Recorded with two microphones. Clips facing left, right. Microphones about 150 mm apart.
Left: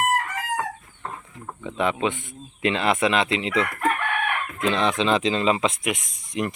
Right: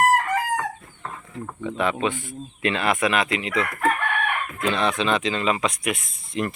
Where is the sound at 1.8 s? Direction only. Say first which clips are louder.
Left 1 dB; 20° left (ahead or behind).